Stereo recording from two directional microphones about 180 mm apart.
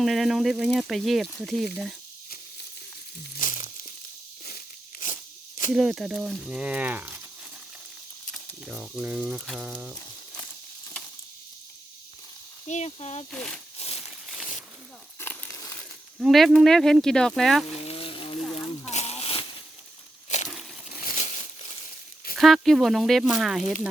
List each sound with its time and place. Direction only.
0.0 s speech: centre (ahead or behind)
3.3 s crumpling: 45° left (ahead or behind)
4.4 s crunch: 50° left (ahead or behind)
5.7 s speech: 5° right (ahead or behind)
8.3 s speech: 5° right (ahead or behind)
12.6 s speech: 40° left (ahead or behind)
13.3 s speech: 5° left (ahead or behind)
13.7 s a sound: 35° left (ahead or behind)
15.2 s a sound: 10° left (ahead or behind)
16.2 s speech: centre (ahead or behind)
17.7 s frying: 30° left (ahead or behind)
18.3 s a sound: centre (ahead or behind)
18.9 s a sound: 35° left (ahead or behind)
22.4 s speech: centre (ahead or behind)